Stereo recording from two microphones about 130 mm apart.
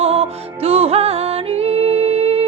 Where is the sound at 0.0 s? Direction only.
50° right (ahead or behind).